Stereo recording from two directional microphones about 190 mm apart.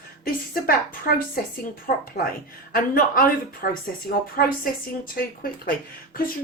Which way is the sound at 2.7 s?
50° left (ahead or behind).